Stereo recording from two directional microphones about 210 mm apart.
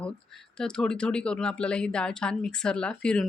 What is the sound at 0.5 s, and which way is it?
Speech, 5° left (ahead or behind).